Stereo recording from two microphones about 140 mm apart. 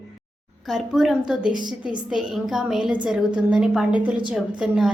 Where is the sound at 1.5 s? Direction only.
30° right (ahead or behind).